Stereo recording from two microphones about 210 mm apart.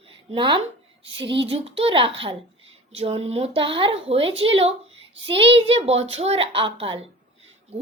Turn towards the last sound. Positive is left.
turn(degrees=-25)  # may be behind; listen again after turning